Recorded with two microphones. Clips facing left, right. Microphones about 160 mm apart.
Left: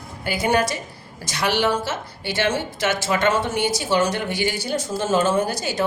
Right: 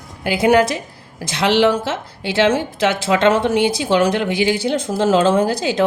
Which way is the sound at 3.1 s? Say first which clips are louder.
Right 7 dB; 90° right.